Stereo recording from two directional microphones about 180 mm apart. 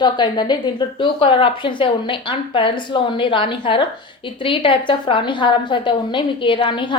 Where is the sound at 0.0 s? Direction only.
25° left (ahead or behind).